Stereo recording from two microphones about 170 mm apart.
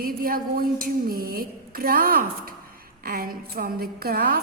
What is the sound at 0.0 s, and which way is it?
A woman's voice, 60° right (ahead or behind).